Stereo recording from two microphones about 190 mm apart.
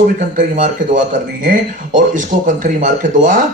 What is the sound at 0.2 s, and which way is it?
Speech, 40° right (ahead or behind).